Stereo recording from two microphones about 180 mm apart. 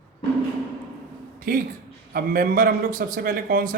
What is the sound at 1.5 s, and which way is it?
A man's voice, 55° right (ahead or behind).